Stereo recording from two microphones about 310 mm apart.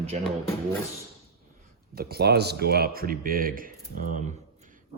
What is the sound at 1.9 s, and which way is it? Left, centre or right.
Speech, right.